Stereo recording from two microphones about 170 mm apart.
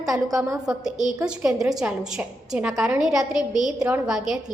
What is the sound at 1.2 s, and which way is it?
A woman's voice, 5° right (ahead or behind).